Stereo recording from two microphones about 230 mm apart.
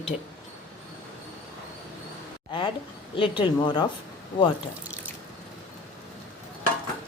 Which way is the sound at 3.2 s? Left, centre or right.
Left.